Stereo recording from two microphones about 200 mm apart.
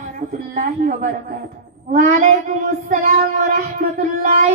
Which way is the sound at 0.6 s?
40° right (ahead or behind).